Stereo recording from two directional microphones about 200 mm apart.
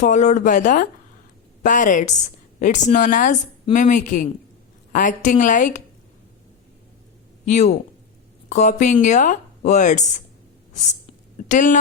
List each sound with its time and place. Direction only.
0.0 s speech: 35° left (ahead or behind)
7.4 s speech: 35° left (ahead or behind)
11.3 s speech: 40° left (ahead or behind)